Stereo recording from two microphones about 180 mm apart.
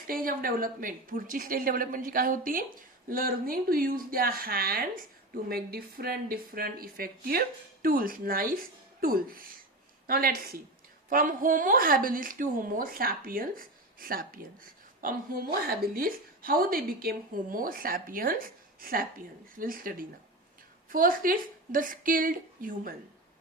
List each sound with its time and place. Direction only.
0.1 s a woman's voice: 50° right (ahead or behind)